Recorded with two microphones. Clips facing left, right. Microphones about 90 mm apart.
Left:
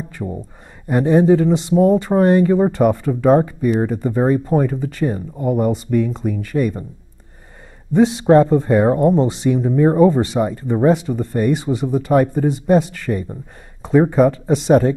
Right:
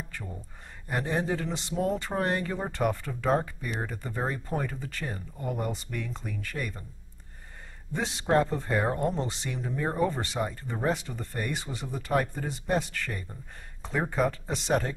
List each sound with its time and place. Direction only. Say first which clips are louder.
0.2 s speech: left 15 dB; 40° left (ahead or behind)
0.8 s speech: left 16 dB; 15° left (ahead or behind)
7.9 s speech: left 14 dB; 10° left (ahead or behind)